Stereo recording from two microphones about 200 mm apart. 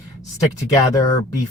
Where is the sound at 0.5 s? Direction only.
15° left (ahead or behind).